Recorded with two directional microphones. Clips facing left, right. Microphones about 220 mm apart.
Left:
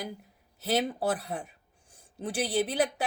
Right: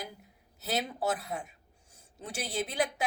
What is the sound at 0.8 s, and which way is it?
A woman's voice, 35° left (ahead or behind).